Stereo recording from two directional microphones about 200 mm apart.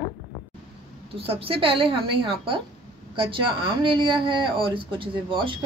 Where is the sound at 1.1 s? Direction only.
30° right (ahead or behind).